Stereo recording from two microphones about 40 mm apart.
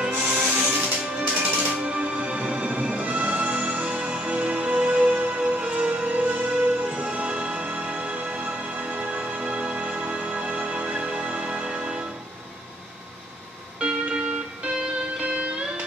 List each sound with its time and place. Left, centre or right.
0.6 s music: right
1.2 s music: right
1.8 s music: right
7.1 s music: right
13.7 s music: right